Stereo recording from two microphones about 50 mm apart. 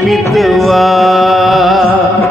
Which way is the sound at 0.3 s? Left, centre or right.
Centre.